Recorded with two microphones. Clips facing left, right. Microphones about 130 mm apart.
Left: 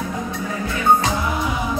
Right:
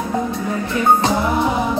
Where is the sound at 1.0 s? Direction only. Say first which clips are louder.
Right 5 dB; 35° right (ahead or behind).